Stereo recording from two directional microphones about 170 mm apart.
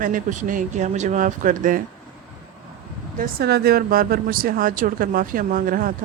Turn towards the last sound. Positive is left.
turn(degrees=-55)  # may be behind; listen again after turning